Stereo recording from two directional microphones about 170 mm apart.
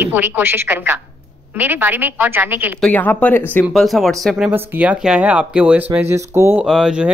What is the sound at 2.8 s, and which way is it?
Speech, 10° left (ahead or behind).